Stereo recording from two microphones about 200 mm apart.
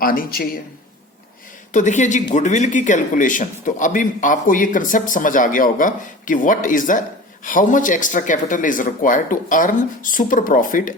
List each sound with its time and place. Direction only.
0.0 s speech: 45° left (ahead or behind)
1.7 s a man's voice: 35° left (ahead or behind)